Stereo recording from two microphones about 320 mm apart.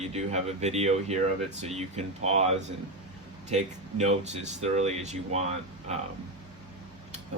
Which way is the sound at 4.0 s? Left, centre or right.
Right.